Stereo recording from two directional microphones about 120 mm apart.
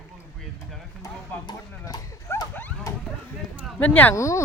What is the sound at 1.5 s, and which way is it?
Speech, 35° left (ahead or behind).